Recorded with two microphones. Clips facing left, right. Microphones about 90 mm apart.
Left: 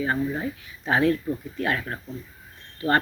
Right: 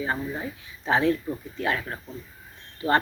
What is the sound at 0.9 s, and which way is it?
Speech, 25° right (ahead or behind).